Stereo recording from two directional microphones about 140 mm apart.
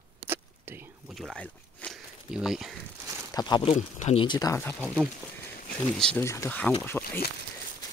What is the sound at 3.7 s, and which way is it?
Speech, 60° left (ahead or behind).